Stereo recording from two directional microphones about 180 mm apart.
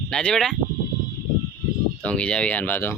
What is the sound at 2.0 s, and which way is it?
Speech, 5° left (ahead or behind).